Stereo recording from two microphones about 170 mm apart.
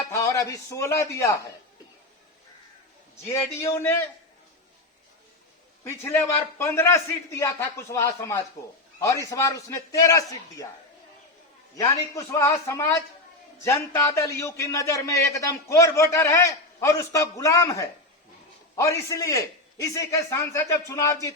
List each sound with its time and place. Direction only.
0.1 s speech: 20° left (ahead or behind)
3.6 s a man's voice: 15° left (ahead or behind)
5.8 s a man's voice: 15° left (ahead or behind)
12.1 s a man's voice: 15° left (ahead or behind)